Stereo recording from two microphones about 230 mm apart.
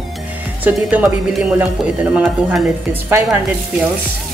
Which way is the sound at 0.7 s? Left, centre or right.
Centre.